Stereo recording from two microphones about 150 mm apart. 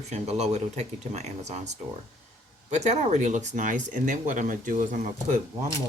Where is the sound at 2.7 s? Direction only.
50° right (ahead or behind).